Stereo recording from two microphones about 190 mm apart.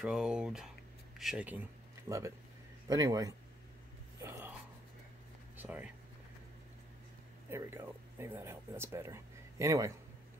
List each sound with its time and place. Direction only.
0.0 s speech: 5° right (ahead or behind); by 3.3 s 20° right (ahead or behind)
4.2 s a sound: 15° right (ahead or behind)
5.6 s speech: 10° right (ahead or behind)
7.4 s speech: 15° right (ahead or behind)